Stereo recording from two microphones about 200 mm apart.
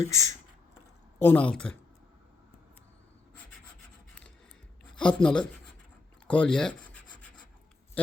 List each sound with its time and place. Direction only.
0.0 s speech: 15° left (ahead or behind)
4.9 s speech: 5° left (ahead or behind)
6.2 s rub: 5° left (ahead or behind)